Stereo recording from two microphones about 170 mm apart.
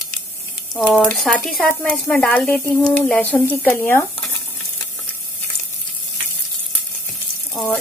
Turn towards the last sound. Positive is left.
turn(degrees=5)  # may be behind; listen again after turning